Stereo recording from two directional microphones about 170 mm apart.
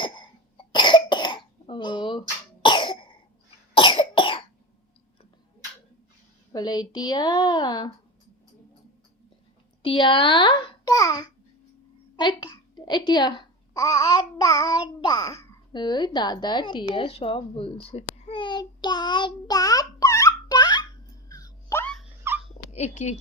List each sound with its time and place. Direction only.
0.0 s cough: 30° left (ahead or behind)
6.5 s a woman's voice: 25° left (ahead or behind)
9.8 s a woman's voice: 30° left (ahead or behind)
21.2 s a sound: 20° left (ahead or behind)
22.7 s speech: 45° left (ahead or behind)